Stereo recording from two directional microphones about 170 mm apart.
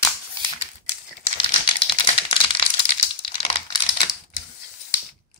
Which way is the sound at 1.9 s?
35° left (ahead or behind).